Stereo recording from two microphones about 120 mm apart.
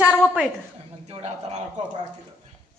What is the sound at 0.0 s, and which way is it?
Speech, 15° left (ahead or behind).